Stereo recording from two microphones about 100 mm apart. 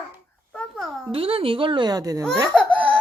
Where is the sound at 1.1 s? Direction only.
70° right (ahead or behind); by 2.2 s 40° right (ahead or behind).